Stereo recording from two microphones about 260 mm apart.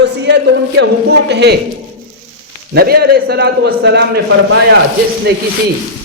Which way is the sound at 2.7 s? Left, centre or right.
Right.